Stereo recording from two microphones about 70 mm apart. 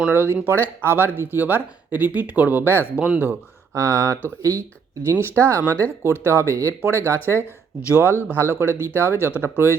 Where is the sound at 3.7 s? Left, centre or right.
Right.